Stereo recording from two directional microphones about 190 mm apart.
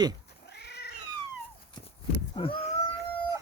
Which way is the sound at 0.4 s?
60° left (ahead or behind).